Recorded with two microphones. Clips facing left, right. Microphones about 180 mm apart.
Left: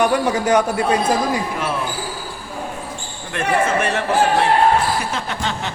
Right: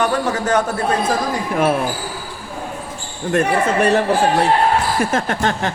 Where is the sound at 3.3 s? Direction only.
40° right (ahead or behind).